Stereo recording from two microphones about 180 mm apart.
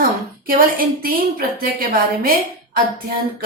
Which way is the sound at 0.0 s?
50° right (ahead or behind).